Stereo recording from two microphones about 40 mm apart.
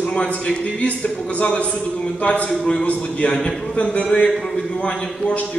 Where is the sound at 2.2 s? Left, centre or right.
Left.